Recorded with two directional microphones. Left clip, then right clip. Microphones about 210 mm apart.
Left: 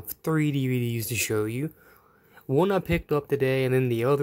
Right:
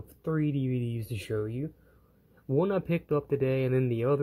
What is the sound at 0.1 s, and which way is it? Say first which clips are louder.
Speech: left 5 dB; 20° left (ahead or behind).